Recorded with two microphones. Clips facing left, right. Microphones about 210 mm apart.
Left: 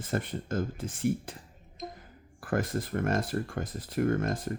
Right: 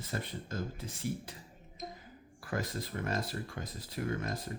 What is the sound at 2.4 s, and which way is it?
Speech, 50° left (ahead or behind).